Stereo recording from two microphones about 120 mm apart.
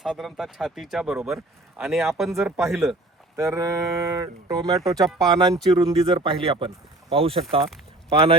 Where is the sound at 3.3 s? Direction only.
25° right (ahead or behind).